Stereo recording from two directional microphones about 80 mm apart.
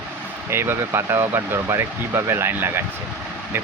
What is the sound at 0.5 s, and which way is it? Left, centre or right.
Speech, right.